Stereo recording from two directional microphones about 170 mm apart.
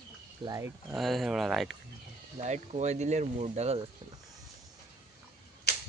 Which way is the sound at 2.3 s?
40° right (ahead or behind).